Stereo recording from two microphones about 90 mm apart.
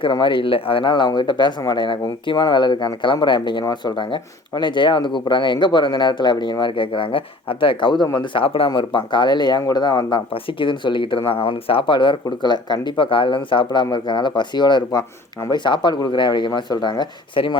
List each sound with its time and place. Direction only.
0.0 s speech: 65° left (ahead or behind)
8.3 s speech: 85° left; by 10.2 s 50° left (ahead or behind)
10.6 s speech: 65° left (ahead or behind)
17.3 s speech: 70° left (ahead or behind)